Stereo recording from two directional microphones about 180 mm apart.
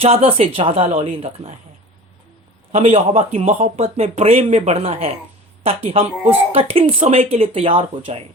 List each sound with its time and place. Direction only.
0.0 s speech: 35° right (ahead or behind)
2.7 s speech: 40° right (ahead or behind)